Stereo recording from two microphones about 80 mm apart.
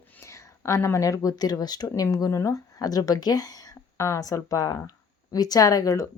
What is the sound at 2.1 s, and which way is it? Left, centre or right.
Speech, left.